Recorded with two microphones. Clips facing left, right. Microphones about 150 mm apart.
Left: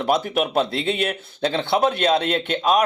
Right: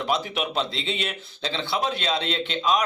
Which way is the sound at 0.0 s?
50° left (ahead or behind).